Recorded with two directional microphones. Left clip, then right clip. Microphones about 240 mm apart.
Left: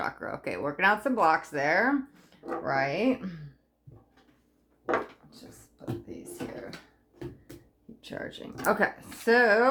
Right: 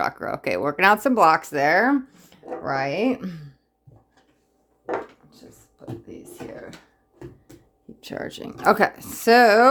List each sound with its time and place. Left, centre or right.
0.0 s speech: right
8.0 s speech: right